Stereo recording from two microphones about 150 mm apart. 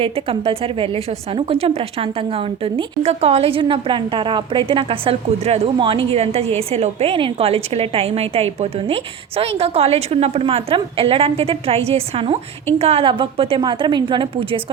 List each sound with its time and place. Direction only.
0.0 s a woman's voice: 40° right (ahead or behind)